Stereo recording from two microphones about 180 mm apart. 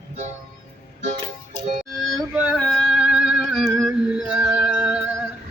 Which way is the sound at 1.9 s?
5° right (ahead or behind).